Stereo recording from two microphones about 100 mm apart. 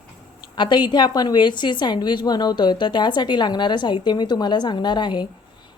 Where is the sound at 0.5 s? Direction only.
50° left (ahead or behind).